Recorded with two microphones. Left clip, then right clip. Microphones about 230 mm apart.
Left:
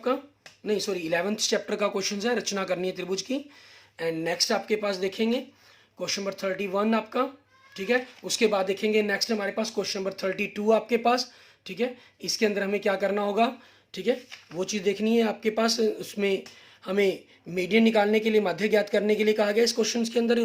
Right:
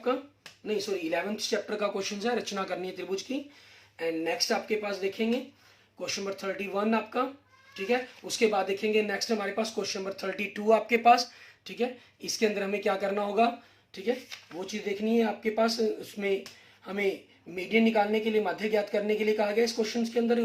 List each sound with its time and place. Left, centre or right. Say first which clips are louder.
0.6 s speech: left 3 dB; left